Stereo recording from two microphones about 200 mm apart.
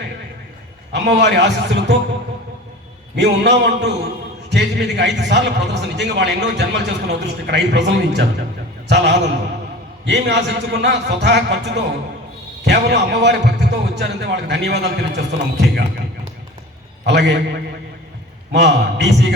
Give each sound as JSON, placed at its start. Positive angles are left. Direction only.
{"t": 0.9, "sound": "a man's voice", "side_deg": -60}
{"t": 3.2, "sound": "a man's voice", "side_deg": -60}
{"t": 17.1, "sound": "a man's voice", "side_deg": -60}